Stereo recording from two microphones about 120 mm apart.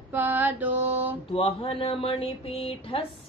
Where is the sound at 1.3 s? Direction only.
50° left (ahead or behind).